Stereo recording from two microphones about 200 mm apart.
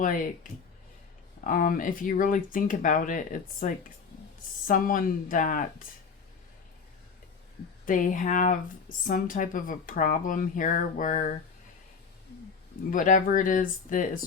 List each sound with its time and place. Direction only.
0.0 s speech: 40° left (ahead or behind)
1.5 s speech: 45° left (ahead or behind)
7.9 s speech: 40° left (ahead or behind)
12.9 s speech: 40° left (ahead or behind)